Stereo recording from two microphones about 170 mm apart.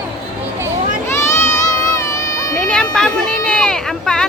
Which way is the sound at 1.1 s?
15° left (ahead or behind).